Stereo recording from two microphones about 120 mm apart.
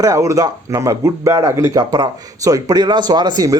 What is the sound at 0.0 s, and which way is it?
Speech, 25° right (ahead or behind).